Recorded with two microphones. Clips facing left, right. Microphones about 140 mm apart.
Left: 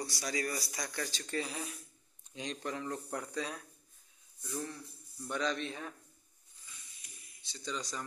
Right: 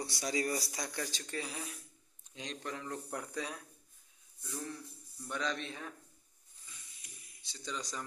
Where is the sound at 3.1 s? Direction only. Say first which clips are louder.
Left 2 dB; 10° right (ahead or behind).